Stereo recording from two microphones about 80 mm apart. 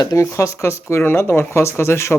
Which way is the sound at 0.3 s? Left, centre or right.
Left.